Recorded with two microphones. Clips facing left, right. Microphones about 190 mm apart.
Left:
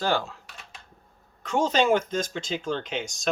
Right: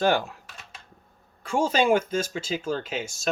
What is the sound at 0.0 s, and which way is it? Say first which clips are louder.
Speech: right 3 dB; 15° right (ahead or behind).